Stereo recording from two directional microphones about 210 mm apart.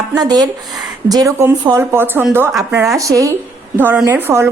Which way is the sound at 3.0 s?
15° right (ahead or behind).